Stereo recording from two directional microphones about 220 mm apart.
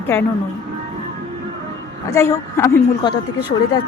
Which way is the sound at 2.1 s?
10° left (ahead or behind).